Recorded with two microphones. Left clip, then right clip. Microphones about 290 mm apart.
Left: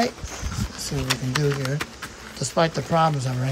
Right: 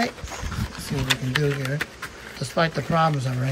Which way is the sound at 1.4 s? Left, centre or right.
Centre.